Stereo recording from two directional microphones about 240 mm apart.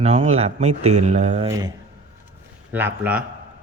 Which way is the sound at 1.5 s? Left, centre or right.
Centre.